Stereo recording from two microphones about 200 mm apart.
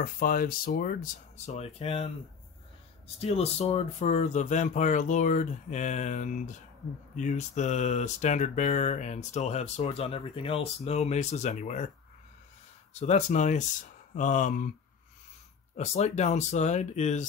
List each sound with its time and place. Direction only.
0.0 s speech: 45° left (ahead or behind); by 2.0 s 30° left (ahead or behind)
3.2 s speech: 30° left (ahead or behind)
13.0 s speech: 35° left (ahead or behind)
15.7 s speech: 35° left (ahead or behind)